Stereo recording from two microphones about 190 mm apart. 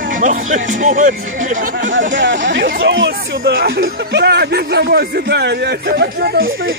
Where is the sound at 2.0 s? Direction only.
70° right (ahead or behind).